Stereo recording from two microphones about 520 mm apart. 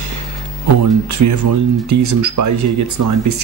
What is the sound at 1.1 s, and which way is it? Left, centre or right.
Speech, right.